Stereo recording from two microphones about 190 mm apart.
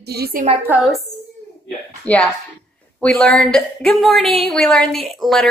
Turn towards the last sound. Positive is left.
turn(degrees=0)  # may be behind; listen again after turning